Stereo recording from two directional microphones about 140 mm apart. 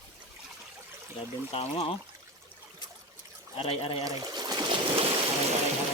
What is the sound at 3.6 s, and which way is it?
Speech, 40° left (ahead or behind).